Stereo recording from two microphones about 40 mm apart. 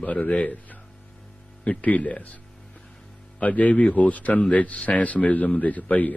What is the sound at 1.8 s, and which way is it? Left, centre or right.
Speech, left.